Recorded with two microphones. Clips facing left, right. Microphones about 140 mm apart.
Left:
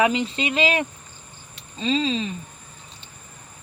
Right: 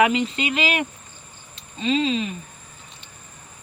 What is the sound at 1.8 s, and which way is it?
Speech, 30° left (ahead or behind).